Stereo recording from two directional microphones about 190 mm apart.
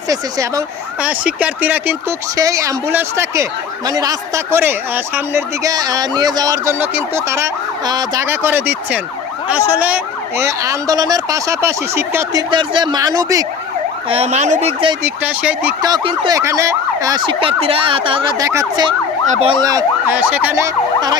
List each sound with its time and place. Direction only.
0.1 s speech: 20° right (ahead or behind)
1.0 s speech: 5° right (ahead or behind)
14.1 s speech: 35° right (ahead or behind)
15.0 s speech: 10° right (ahead or behind)
15.8 s speech: 25° right (ahead or behind)
19.3 s speech: 35° right (ahead or behind)
19.6 s speech: 15° right (ahead or behind)